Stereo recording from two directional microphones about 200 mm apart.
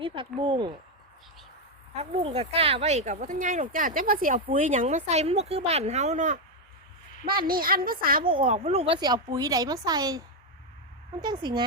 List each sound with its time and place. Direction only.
0.0 s speech: 25° right (ahead or behind)
2.0 s speech: 30° right (ahead or behind)
7.3 s a woman's voice: 45° right (ahead or behind); by 11.6 s 20° right (ahead or behind)